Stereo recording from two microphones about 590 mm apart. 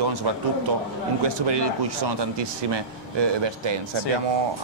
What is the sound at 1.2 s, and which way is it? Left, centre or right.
A man's voice, right.